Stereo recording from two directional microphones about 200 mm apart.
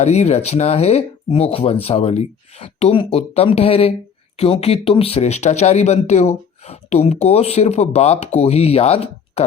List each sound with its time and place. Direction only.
0.0 s speech: 35° left (ahead or behind)